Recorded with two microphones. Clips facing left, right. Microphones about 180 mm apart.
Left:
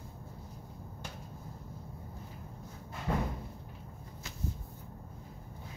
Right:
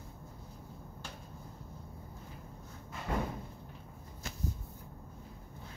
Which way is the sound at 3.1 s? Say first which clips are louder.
Left 2 dB; 30° left (ahead or behind).